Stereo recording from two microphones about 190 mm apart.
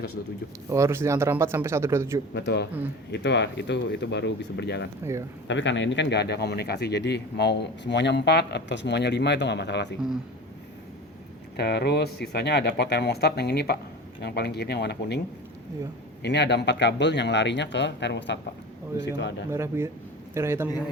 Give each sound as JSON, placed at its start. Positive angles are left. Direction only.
{"t": 0.7, "sound": "speech", "side_deg": -15}
{"t": 2.3, "sound": "speech", "side_deg": 60}
{"t": 5.5, "sound": "speech", "side_deg": 70}
{"t": 11.5, "sound": "speech", "side_deg": 60}
{"t": 16.2, "sound": "speech", "side_deg": 65}
{"t": 19.5, "sound": "speech", "side_deg": -15}